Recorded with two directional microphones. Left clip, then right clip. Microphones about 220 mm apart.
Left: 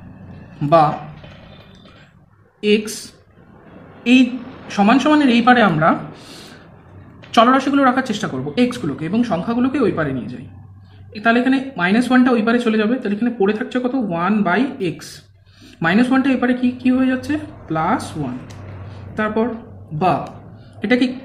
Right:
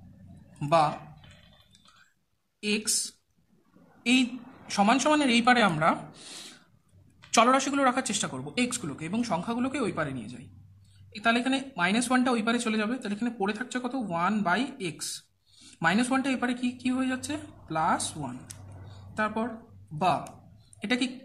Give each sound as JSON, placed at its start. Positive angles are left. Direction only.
{"t": 0.6, "sound": "speech", "side_deg": -25}
{"t": 4.0, "sound": "speech", "side_deg": -30}
{"t": 20.8, "sound": "speech", "side_deg": -25}